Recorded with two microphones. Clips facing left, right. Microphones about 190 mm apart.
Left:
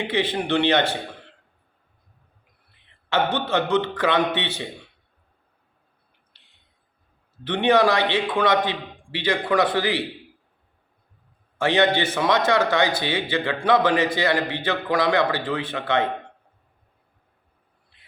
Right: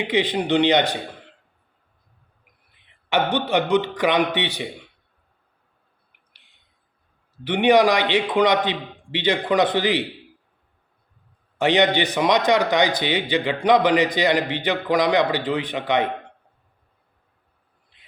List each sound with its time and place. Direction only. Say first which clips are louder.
0.0 s a man's voice: right 2 dB; 15° right (ahead or behind)
3.1 s a man's voice: right 2 dB; 15° right (ahead or behind)
7.4 s a man's voice: right 2 dB; 15° right (ahead or behind)
11.5 s a man's voice: right 2 dB; 20° right (ahead or behind)